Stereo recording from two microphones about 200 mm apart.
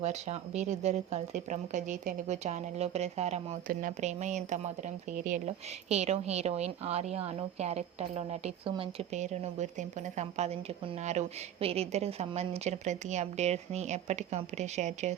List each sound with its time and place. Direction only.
0.0 s a woman's voice: 35° right (ahead or behind)